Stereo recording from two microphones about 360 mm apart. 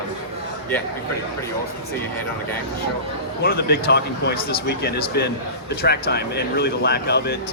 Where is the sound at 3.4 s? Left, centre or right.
Left.